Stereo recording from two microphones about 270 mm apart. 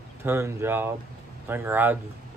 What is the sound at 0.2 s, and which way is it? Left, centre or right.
Speech, centre.